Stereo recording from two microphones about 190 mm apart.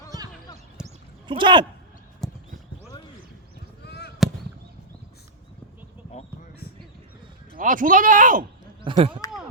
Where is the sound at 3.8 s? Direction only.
60° left (ahead or behind).